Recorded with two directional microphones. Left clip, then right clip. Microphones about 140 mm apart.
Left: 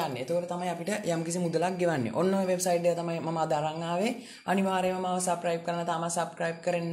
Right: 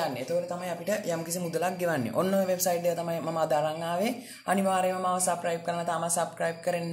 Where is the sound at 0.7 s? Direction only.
55° left (ahead or behind).